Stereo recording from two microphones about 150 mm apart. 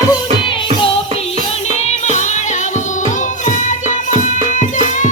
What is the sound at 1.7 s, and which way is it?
Music, 50° left (ahead or behind).